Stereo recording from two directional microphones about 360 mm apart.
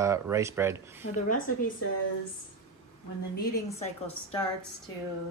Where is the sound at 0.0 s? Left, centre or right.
Centre.